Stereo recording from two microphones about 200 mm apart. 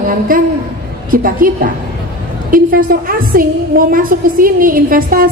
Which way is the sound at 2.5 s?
45° right (ahead or behind).